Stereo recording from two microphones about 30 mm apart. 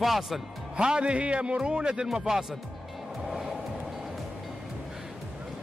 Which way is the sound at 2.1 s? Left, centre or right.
Centre.